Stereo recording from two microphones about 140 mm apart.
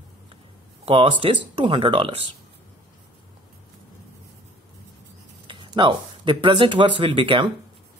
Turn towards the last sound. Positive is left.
turn(degrees=-40)  # may be behind; listen again after turning